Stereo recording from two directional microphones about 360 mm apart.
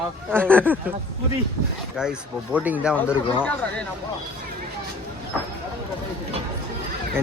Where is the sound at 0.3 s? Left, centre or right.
Centre.